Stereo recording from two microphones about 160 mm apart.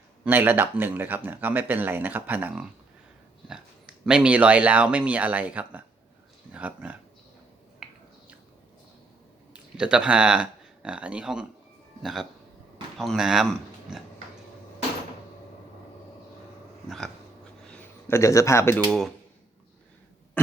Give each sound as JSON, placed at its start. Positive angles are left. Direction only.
{"t": 0.3, "sound": "speech", "side_deg": -15}
{"t": 7.8, "sound": "a sound", "side_deg": -5}
{"t": 9.5, "sound": "speech", "side_deg": -5}
{"t": 17.7, "sound": "speech", "side_deg": 15}